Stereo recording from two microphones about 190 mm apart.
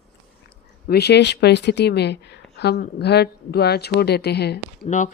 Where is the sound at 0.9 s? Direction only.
60° left (ahead or behind).